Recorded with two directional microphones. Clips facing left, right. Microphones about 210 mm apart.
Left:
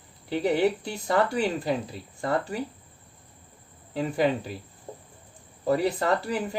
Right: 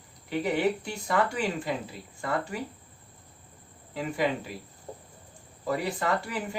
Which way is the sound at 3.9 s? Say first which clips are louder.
Left 4 dB; 35° left (ahead or behind).